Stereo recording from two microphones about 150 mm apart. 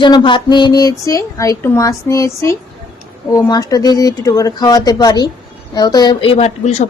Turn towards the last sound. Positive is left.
turn(degrees=45)  # may be behind; listen again after turning